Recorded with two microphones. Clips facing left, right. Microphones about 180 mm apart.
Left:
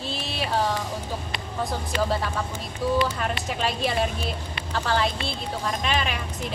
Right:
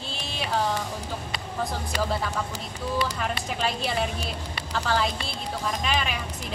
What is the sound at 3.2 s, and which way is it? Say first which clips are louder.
A woman's voice: left 1 dB; centre (ahead or behind).